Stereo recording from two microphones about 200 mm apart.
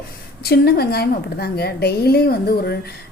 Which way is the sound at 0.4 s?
50° left (ahead or behind).